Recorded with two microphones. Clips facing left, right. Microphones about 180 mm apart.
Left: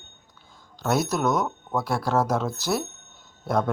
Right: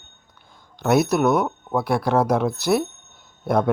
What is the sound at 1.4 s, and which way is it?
Speech, 30° right (ahead or behind).